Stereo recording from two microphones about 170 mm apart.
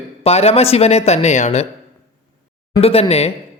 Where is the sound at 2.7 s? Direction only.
35° left (ahead or behind).